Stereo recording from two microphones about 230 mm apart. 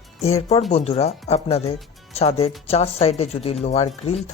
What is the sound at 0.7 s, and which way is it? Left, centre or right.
Speech, left.